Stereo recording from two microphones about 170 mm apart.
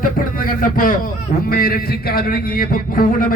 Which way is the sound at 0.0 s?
55° left (ahead or behind).